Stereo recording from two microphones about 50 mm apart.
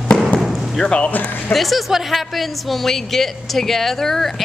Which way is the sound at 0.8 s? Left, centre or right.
Left.